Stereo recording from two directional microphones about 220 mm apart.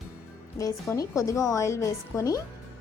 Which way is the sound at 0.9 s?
15° left (ahead or behind).